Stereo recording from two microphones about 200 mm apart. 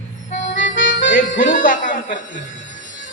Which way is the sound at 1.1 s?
40° left (ahead or behind).